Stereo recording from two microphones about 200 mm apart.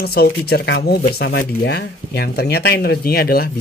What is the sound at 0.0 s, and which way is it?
Speech, 50° left (ahead or behind).